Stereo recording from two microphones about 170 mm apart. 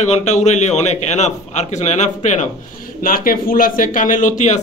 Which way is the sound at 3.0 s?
55° left (ahead or behind).